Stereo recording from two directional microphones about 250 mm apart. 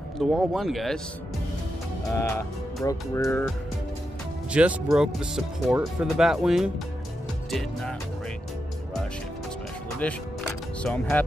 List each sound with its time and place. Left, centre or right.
0.2 s speech: centre
2.1 s speech: centre
4.5 s speech: centre
10.0 s speech: centre